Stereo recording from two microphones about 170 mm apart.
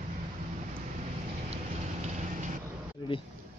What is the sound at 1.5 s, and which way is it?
Vehicle, 40° right (ahead or behind).